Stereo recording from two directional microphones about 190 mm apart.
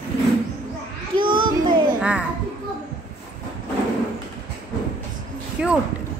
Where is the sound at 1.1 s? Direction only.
25° right (ahead or behind).